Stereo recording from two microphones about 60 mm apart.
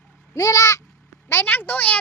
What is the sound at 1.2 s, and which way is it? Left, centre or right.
Speech, left.